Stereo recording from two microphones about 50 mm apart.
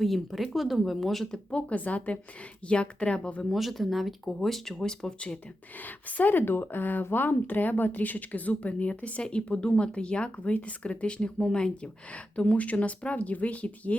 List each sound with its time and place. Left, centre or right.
0.0 s speech: centre
1.5 s speech: left
3.5 s speech: centre
5.8 s a woman's voice: left
6.3 s speech: left